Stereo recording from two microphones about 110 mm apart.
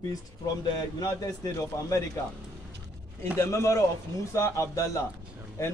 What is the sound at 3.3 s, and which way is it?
A man's voice, 25° left (ahead or behind).